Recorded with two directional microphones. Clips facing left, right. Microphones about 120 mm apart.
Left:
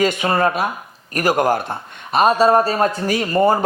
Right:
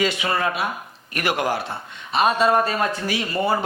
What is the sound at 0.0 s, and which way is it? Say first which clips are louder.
A man's voice: left 5 dB; 45° left (ahead or behind).